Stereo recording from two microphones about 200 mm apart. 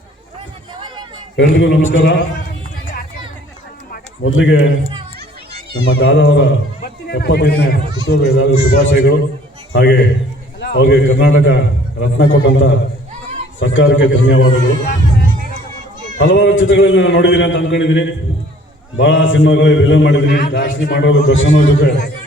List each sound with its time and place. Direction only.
1.4 s a man's voice: 70° left (ahead or behind)
4.2 s a man's voice: 70° left (ahead or behind)
16.2 s a man's voice: 65° left (ahead or behind)